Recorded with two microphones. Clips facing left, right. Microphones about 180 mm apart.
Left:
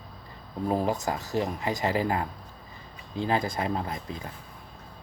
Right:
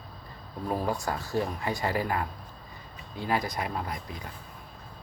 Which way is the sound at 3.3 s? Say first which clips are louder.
Left 2 dB; 25° left (ahead or behind).